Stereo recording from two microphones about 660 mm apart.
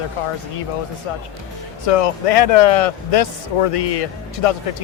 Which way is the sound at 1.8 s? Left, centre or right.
Left.